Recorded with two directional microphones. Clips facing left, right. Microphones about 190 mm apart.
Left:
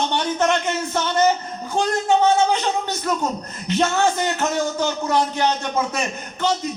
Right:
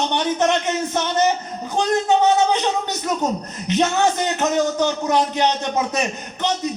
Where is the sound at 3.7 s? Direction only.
20° right (ahead or behind).